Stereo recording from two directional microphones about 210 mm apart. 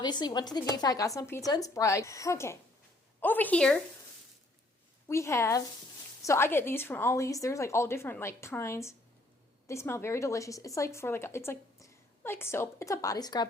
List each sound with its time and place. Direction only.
0.0 s speech: 20° left (ahead or behind)
5.0 s speech: 15° left (ahead or behind)